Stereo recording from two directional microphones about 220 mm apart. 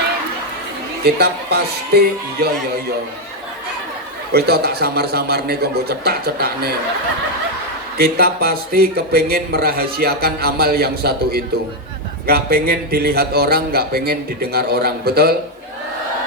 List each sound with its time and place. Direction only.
1.0 s speech: 45° right (ahead or behind)
4.3 s speech: 45° right (ahead or behind)
7.9 s speech: 45° right (ahead or behind)